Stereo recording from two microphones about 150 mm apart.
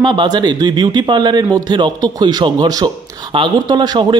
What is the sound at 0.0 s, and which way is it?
Speech, 30° right (ahead or behind).